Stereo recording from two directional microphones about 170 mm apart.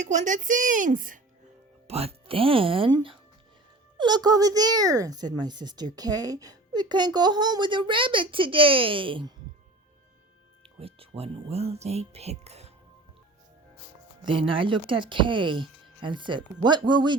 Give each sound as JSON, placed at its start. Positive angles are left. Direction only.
{"t": 0.0, "sound": "speech", "side_deg": -45}
{"t": 1.9, "sound": "a child's voice", "side_deg": -35}
{"t": 10.6, "sound": "speech", "side_deg": -35}
{"t": 14.3, "sound": "a child's voice", "side_deg": -30}